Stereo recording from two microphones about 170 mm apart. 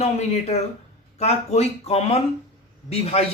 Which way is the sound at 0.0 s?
40° left (ahead or behind).